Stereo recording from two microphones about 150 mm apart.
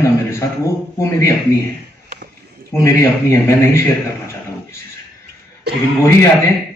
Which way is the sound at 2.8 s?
20° left (ahead or behind).